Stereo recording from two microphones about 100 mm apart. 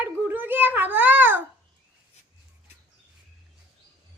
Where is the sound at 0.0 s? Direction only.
20° right (ahead or behind).